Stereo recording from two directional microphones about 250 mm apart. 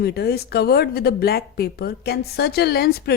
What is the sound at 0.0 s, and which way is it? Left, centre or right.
Speech, left.